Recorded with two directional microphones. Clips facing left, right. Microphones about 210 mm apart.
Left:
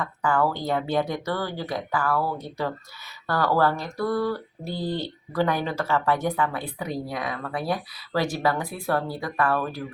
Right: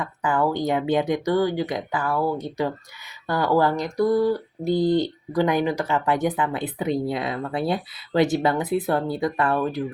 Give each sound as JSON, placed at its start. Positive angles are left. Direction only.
{"t": 0.0, "sound": "speech", "side_deg": -15}